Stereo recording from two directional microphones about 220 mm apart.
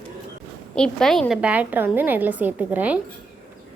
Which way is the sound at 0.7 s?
5° left (ahead or behind).